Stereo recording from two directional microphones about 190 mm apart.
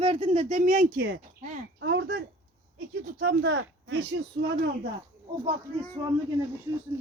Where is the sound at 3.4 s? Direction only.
80° right.